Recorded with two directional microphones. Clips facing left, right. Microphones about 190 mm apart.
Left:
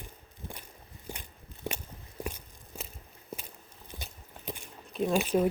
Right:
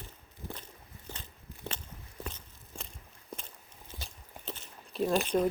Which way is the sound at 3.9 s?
15° left (ahead or behind).